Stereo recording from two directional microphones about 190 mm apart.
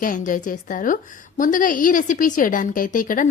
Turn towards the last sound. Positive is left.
turn(degrees=45)  # may be behind; listen again after turning